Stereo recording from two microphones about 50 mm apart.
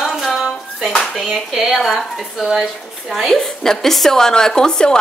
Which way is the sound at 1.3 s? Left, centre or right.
Centre.